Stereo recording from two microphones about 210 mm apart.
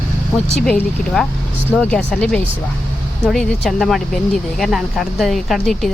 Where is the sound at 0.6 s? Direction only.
5° left (ahead or behind).